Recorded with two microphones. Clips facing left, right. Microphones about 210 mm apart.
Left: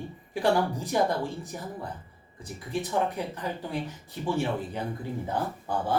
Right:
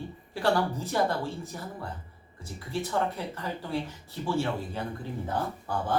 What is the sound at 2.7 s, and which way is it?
A man's voice, 15° left (ahead or behind).